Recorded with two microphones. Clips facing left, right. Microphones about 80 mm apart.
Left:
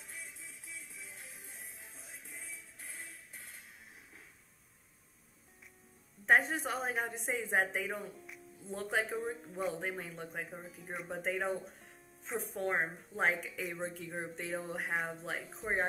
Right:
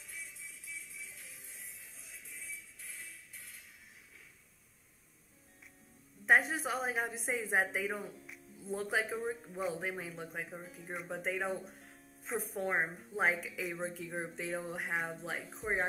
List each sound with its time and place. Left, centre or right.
0.0 s music: left
6.2 s a woman's voice: centre